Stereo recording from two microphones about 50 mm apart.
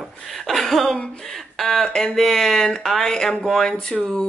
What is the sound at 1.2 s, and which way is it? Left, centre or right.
Speech, centre.